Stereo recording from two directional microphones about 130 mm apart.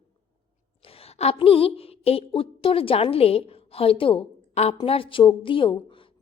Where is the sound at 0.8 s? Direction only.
50° left (ahead or behind).